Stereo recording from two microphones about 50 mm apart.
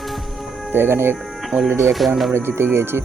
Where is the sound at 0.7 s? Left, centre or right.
Right.